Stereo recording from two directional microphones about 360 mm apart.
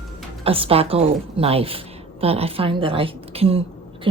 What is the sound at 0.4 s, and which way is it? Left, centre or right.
A woman's voice, centre.